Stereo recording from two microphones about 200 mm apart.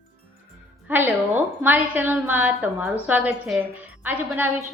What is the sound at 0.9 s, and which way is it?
A woman's voice, 10° right (ahead or behind).